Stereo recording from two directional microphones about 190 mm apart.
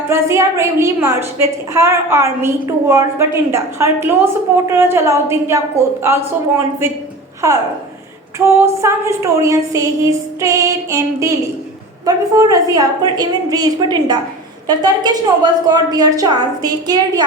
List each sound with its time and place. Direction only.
0.1 s a woman's voice: 15° right (ahead or behind)
7.4 s a woman's voice: 15° right (ahead or behind)